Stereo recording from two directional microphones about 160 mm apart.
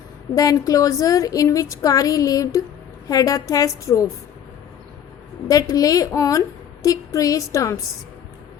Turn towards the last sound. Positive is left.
turn(degrees=20)  # may be behind; listen again after turning